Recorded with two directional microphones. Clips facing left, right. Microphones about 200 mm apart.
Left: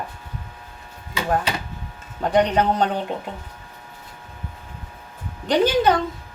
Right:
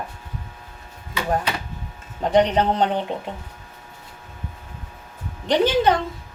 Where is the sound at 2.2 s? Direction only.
20° right (ahead or behind).